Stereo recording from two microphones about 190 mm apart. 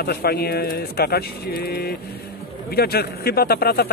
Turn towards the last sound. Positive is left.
turn(degrees=55)  # may be behind; listen again after turning